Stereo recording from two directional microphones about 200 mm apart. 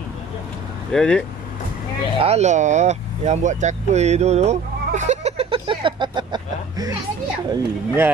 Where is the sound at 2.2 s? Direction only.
35° right (ahead or behind).